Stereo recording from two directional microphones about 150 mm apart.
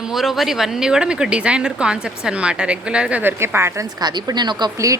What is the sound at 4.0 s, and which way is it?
Speech, 30° right (ahead or behind).